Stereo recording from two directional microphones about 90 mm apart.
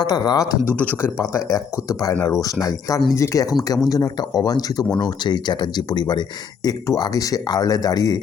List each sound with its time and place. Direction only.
0.0 s speech: 50° left (ahead or behind)
0.6 s speech: 20° left (ahead or behind)
1.5 s speech: 40° left (ahead or behind)